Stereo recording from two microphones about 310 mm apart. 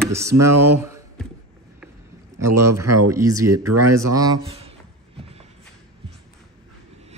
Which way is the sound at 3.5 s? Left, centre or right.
Right.